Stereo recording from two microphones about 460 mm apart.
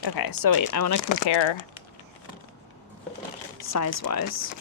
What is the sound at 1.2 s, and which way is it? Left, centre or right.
Speech, left.